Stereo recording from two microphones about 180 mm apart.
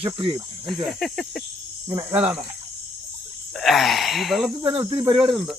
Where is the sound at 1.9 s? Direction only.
15° right (ahead or behind).